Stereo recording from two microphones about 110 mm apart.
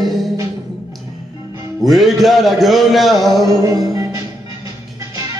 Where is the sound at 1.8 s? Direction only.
Centre (ahead or behind).